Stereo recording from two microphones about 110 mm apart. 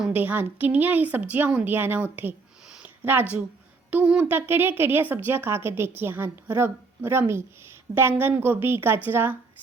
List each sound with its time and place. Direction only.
0.1 s speech: 15° right (ahead or behind)
2.6 s a sound: 10° right (ahead or behind)
3.9 s speech: 10° right (ahead or behind)